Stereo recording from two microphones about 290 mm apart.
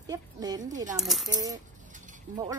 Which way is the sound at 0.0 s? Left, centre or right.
Centre.